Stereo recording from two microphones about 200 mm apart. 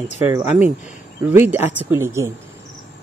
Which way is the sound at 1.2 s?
10° right (ahead or behind).